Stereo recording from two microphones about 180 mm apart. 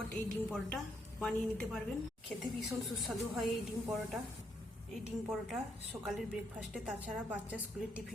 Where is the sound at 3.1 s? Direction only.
Centre (ahead or behind).